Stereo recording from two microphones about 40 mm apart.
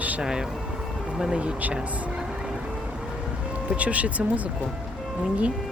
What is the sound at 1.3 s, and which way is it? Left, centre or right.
Speech, right.